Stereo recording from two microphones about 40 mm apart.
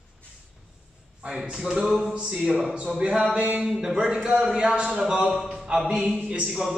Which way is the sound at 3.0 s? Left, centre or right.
Right.